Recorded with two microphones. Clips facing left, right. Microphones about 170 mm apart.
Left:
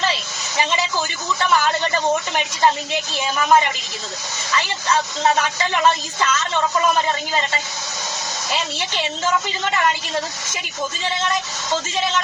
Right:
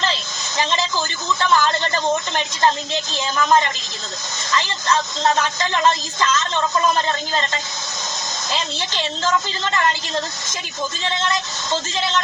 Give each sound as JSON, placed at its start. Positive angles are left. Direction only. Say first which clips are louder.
{"t": 0.0, "sound": "a woman's voice", "louder": "left 1 dB", "side_deg": 10}